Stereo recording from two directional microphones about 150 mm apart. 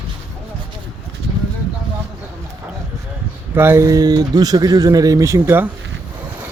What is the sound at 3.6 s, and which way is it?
Speech, 15° right (ahead or behind).